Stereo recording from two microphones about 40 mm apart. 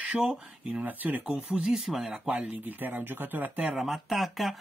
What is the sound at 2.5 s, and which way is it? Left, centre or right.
Speech, right.